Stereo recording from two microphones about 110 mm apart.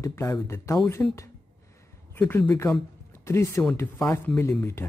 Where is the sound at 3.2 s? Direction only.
25° left (ahead or behind).